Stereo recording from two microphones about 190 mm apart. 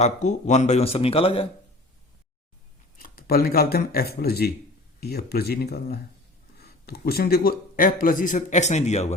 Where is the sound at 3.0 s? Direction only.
50° left (ahead or behind).